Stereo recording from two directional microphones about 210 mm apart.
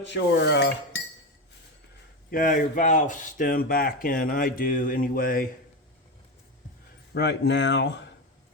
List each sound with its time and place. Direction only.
0.0 s speech: 55° left (ahead or behind)
2.3 s speech: 40° left (ahead or behind)
7.1 s speech: 55° left (ahead or behind)